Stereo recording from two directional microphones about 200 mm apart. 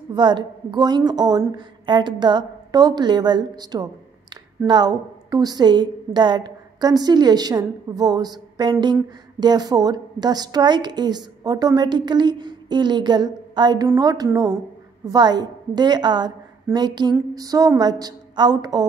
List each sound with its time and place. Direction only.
0.1 s a woman's voice: 20° right (ahead or behind)